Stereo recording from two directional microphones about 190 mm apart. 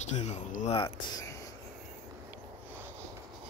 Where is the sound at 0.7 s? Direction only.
25° left (ahead or behind).